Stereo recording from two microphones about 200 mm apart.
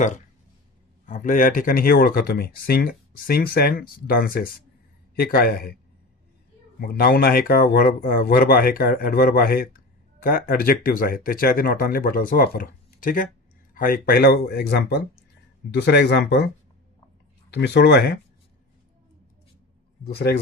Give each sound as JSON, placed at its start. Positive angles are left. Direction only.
{"t": 1.0, "sound": "speech", "side_deg": 40}
{"t": 6.7, "sound": "speech", "side_deg": 45}
{"t": 17.5, "sound": "speech", "side_deg": 55}
{"t": 20.1, "sound": "speech", "side_deg": 55}